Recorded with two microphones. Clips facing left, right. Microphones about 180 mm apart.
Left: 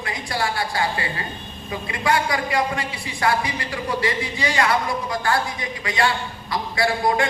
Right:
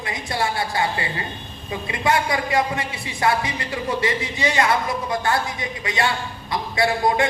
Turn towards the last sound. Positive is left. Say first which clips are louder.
# right 1 dB
turn(degrees=-20)  # may be behind; listen again after turning